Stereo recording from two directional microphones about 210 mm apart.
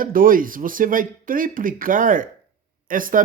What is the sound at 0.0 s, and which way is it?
Speech, 40° right (ahead or behind).